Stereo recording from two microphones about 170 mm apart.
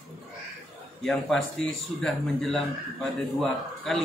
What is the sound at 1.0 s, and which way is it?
A man's voice, 5° left (ahead or behind).